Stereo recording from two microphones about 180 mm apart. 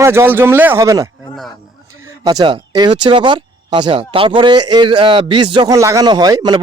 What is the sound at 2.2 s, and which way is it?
Speech, 20° right (ahead or behind).